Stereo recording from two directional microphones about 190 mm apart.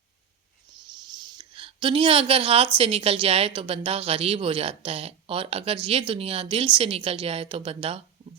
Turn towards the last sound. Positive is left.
turn(degrees=-30)  # may be behind; listen again after turning